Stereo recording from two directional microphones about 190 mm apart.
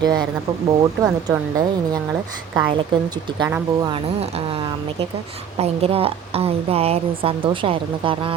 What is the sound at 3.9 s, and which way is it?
A woman's voice, 30° right (ahead or behind).